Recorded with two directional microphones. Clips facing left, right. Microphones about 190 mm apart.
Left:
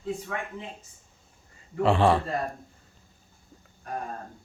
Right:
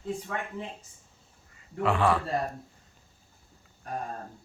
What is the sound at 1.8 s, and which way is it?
Speech, 25° left (ahead or behind).